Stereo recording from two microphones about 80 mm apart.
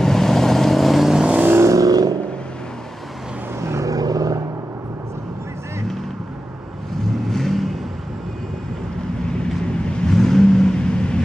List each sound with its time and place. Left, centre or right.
0.0 s vehicle: centre
1.3 s vehicle: right
1.6 s vehicle: right
3.6 s vehicle: right
7.2 s vehicle: centre
9.9 s vehicle: centre